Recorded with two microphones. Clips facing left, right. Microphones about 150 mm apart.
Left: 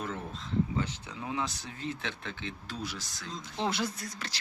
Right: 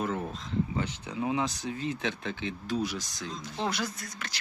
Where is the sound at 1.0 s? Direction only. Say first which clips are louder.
Right 5 dB; 15° right (ahead or behind).